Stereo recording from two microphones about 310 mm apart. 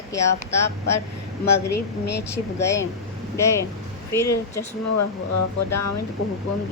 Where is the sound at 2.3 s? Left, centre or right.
Centre.